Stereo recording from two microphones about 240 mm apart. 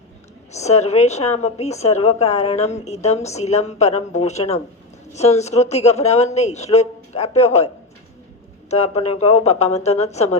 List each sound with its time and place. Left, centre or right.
0.5 s a woman's voice: left
8.7 s a woman's voice: left